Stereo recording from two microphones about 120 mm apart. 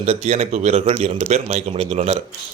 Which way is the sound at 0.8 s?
50° right (ahead or behind).